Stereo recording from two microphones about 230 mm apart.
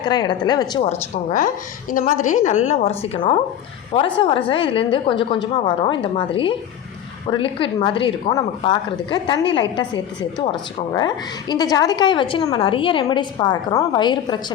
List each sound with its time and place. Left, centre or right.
0.0 s speech: centre
0.8 s a woman's voice: left